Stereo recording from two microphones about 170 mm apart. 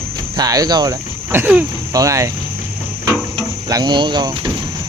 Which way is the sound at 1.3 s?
10° right (ahead or behind).